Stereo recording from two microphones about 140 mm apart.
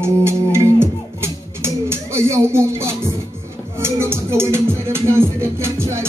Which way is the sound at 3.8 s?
20° right (ahead or behind).